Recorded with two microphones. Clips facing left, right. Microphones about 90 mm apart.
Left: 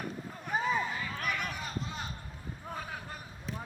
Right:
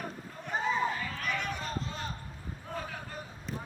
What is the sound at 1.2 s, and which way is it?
Run, 10° left (ahead or behind).